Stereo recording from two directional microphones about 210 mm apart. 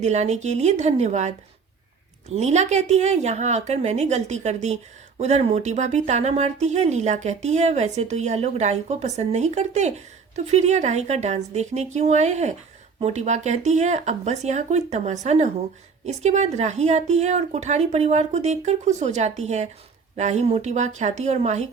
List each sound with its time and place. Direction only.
0.0 s speech: 30° right (ahead or behind)
2.3 s speech: 30° right (ahead or behind)